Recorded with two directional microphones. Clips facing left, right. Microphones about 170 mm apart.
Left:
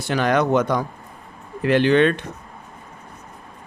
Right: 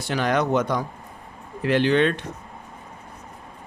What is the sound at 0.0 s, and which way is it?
Speech, 60° left (ahead or behind).